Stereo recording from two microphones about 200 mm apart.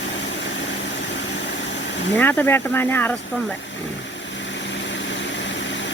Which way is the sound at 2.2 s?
10° left (ahead or behind).